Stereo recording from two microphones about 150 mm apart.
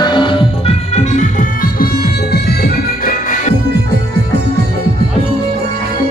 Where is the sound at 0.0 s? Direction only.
30° left (ahead or behind); by 3.5 s 65° left (ahead or behind).